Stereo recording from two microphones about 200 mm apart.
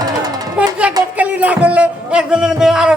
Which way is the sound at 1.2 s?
5° right (ahead or behind).